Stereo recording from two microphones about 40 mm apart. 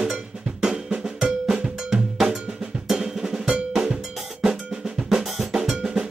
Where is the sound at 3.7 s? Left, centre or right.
Centre.